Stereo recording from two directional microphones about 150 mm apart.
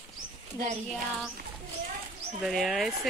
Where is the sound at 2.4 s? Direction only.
Centre (ahead or behind).